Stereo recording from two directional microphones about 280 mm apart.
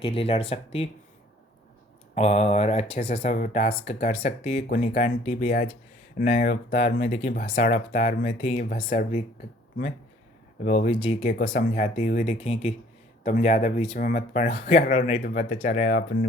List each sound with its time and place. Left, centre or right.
0.0 s speech: centre
2.1 s speech: left
10.6 s speech: left